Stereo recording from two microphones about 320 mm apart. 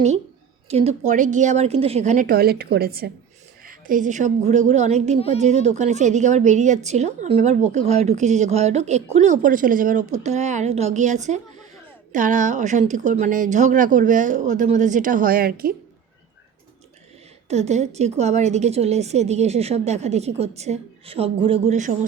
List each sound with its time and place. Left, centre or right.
0.7 s a woman's voice: centre
17.5 s a woman's voice: right